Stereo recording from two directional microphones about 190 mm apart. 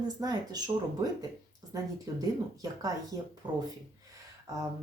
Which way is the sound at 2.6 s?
20° right (ahead or behind).